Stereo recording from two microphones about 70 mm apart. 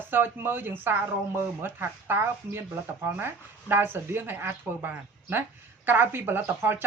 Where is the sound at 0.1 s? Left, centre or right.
Right.